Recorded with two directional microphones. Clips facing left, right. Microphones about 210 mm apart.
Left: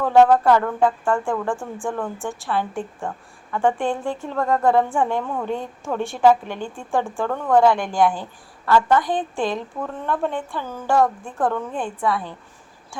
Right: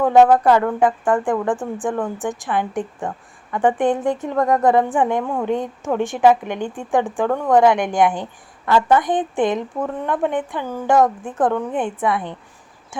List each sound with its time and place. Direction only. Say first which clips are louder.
0.0 s a woman's voice: right 2 dB; 15° right (ahead or behind)